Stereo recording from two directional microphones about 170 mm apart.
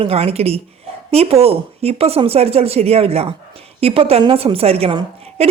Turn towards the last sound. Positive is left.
turn(degrees=-35)  # may be behind; listen again after turning